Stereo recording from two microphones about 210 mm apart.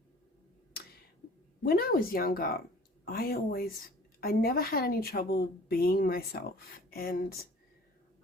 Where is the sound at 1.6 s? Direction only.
45° left (ahead or behind).